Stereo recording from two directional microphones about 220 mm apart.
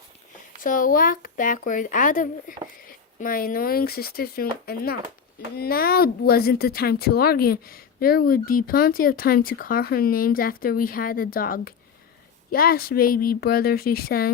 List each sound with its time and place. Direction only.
0.6 s speech: 40° left (ahead or behind)